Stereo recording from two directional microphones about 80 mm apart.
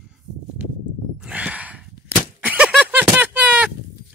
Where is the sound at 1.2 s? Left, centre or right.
Centre.